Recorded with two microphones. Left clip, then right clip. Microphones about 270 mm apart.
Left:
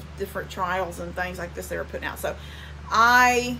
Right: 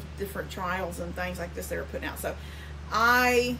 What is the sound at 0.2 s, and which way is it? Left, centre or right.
Speech, centre.